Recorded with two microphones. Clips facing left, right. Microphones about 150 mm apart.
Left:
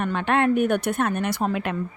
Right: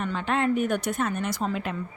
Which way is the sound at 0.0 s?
60° left (ahead or behind).